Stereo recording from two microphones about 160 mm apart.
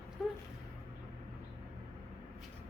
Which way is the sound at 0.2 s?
Centre (ahead or behind).